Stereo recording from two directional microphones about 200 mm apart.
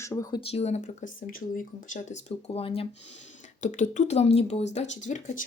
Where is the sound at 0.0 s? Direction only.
15° left (ahead or behind).